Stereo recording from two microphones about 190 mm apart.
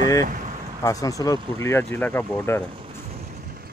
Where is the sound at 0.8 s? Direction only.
15° left (ahead or behind).